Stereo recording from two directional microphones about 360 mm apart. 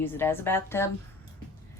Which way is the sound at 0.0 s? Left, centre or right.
Centre.